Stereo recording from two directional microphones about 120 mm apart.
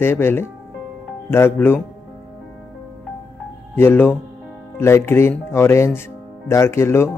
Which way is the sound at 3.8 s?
20° left (ahead or behind).